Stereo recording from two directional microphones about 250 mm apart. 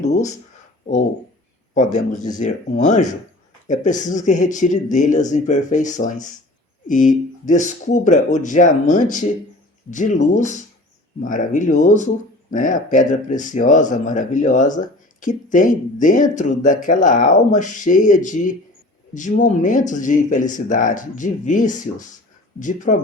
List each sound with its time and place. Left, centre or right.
0.0 s speech: left
1.7 s speech: left